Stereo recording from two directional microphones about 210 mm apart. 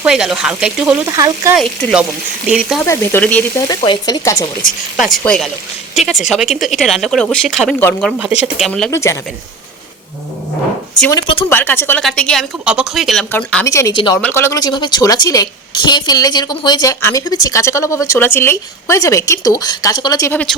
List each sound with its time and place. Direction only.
0.0 s speech: 5° right (ahead or behind)
1.0 s speech: 15° right (ahead or behind)
1.5 s speech: centre (ahead or behind)
2.8 s a woman's voice: 10° left (ahead or behind)
3.8 s a woman's voice: 20° left (ahead or behind)
4.9 s speech: centre (ahead or behind)
7.8 s a woman's voice: 10° left (ahead or behind)
8.2 s speech: 5° right (ahead or behind)
8.9 s a woman's voice: 15° left (ahead or behind)
11.1 s speech: 25° left (ahead or behind)
11.4 s a woman's voice: 10° left (ahead or behind)
14.2 s a woman's voice: 10° left (ahead or behind)